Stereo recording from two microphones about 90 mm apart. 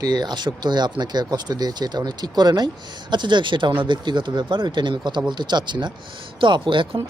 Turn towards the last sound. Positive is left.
turn(degrees=-65)  # may be behind; listen again after turning